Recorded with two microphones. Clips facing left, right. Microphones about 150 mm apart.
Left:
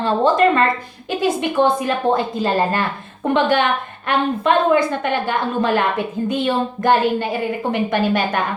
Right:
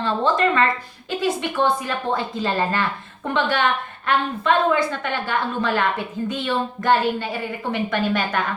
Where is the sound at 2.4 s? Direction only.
45° left (ahead or behind).